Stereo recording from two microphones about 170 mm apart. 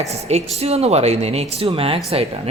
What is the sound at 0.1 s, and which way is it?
Speech, 40° right (ahead or behind).